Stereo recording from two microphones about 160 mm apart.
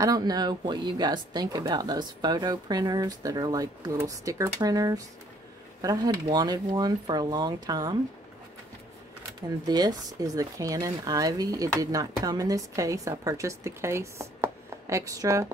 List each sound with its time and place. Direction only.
0.0 s speech: 25° right (ahead or behind)
9.7 s speech: 25° right (ahead or behind)